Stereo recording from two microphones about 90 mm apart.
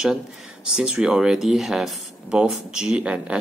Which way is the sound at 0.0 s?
5° right (ahead or behind).